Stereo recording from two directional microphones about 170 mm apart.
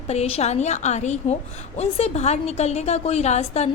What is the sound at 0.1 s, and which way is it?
A woman's voice, 40° left (ahead or behind).